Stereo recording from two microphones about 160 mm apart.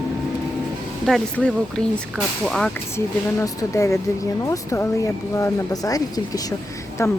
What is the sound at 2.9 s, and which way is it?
Speech, 15° left (ahead or behind).